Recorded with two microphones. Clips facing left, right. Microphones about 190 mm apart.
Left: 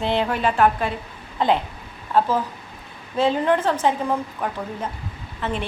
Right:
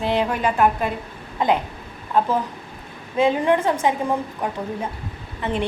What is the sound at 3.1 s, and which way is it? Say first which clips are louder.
A woman's voice: right 1 dB; 15° right (ahead or behind).